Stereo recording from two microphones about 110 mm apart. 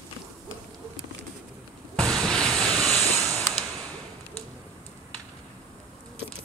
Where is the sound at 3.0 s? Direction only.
30° right (ahead or behind).